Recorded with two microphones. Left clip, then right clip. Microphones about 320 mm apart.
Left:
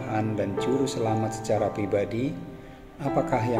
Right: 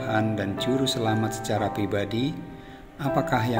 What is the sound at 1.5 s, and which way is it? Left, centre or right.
Speech, right.